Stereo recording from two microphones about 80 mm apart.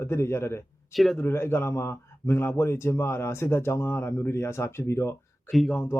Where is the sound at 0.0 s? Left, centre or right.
Left.